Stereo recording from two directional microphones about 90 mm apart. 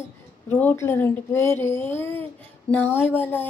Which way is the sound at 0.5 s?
20° left (ahead or behind).